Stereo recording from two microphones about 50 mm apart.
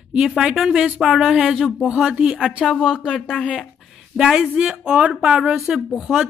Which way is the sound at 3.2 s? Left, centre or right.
Left.